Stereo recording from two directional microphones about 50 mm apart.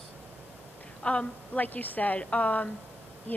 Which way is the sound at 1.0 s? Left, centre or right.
Left.